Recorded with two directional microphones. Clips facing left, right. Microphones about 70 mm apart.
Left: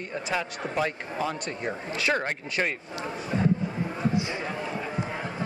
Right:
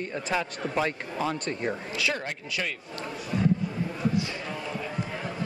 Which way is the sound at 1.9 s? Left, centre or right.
Left.